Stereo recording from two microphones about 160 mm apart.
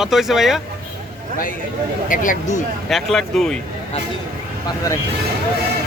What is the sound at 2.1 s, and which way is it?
Speech, 55° left (ahead or behind).